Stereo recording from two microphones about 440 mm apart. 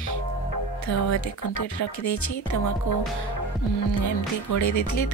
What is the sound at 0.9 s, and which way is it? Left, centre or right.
Speech, left.